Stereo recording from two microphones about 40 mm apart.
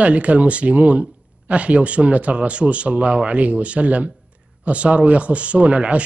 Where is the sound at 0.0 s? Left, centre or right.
Right.